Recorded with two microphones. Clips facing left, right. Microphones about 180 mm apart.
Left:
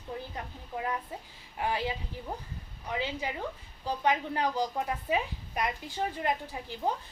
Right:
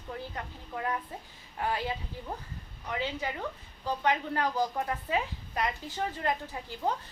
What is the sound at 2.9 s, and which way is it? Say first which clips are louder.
A woman's voice: even; 15° left (ahead or behind).